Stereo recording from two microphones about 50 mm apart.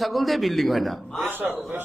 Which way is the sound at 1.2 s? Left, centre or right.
Right.